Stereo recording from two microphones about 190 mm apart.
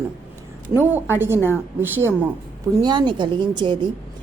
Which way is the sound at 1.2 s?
10° right (ahead or behind).